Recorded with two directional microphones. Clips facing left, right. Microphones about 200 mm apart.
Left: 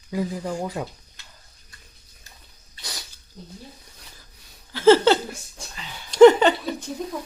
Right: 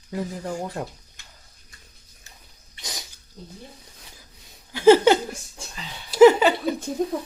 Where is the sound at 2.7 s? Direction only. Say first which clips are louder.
Right 1 dB; 20° right (ahead or behind).